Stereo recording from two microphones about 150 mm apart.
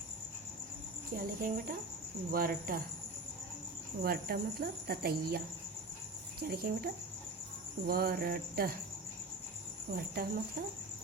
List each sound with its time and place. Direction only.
1.1 s speech: 70° right (ahead or behind)
4.0 s speech: 90° right
6.5 s speech: 90° right
9.9 s speech: 85° right